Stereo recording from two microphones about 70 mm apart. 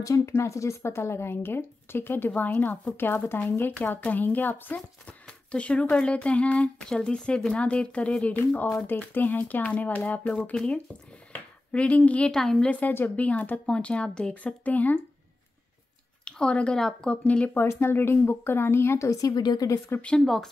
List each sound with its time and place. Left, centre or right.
0.0 s speech: left; by 8.4 s centre
8.8 s speech: left
12.4 s speech: centre
12.9 s speech: left
16.3 s speech: centre
17.6 s speech: left
19.0 s a woman's voice: left
20.2 s speech: centre